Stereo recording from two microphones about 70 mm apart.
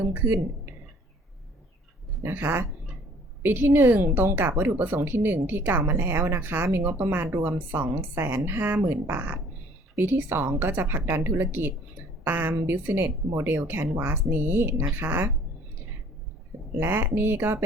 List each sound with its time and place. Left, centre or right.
0.0 s speech: right
2.2 s a woman's voice: right
16.7 s a woman's voice: right